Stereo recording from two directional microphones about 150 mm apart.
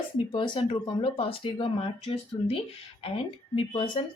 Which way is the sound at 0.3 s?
35° left (ahead or behind).